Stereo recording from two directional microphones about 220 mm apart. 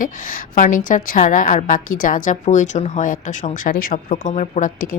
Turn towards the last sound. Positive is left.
turn(degrees=35)  # may be behind; listen again after turning